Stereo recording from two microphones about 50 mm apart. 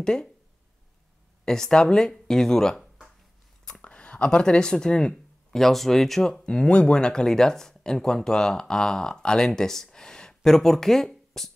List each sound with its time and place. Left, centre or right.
0.0 s speech: centre
1.4 s speech: centre
3.8 s speech: left
5.5 s speech: centre
6.4 s speech: centre